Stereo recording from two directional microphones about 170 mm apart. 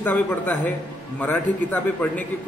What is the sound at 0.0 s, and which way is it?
A man's voice, 10° left (ahead or behind).